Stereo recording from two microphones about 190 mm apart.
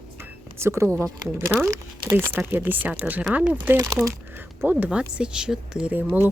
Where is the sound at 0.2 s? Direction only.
15° right (ahead or behind).